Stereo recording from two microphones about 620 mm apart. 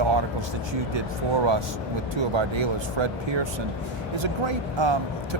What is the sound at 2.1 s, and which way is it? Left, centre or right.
Speech, right.